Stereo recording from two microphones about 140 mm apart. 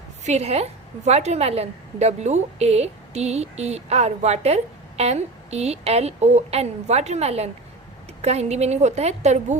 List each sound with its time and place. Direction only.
0.3 s a woman's voice: 50° right (ahead or behind)